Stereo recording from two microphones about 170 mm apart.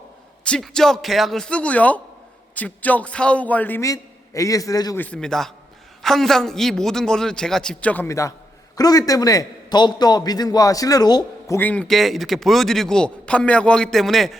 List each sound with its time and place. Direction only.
0.4 s a man's voice: 5° left (ahead or behind); by 5.0 s 20° left (ahead or behind)
5.0 s a man's voice: 5° left (ahead or behind); by 11.5 s 25° left (ahead or behind)
11.5 s a man's voice: 10° left (ahead or behind)